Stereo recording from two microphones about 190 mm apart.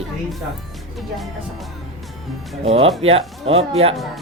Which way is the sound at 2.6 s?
30° right (ahead or behind).